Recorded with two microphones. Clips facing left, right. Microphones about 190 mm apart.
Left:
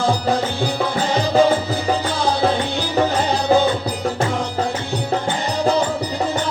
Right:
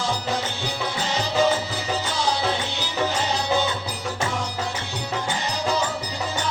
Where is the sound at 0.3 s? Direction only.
55° left (ahead or behind).